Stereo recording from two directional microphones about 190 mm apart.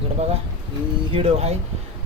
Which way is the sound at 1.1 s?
30° right (ahead or behind).